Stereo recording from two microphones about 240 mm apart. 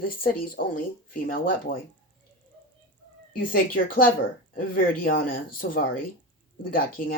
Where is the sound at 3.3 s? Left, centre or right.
Left.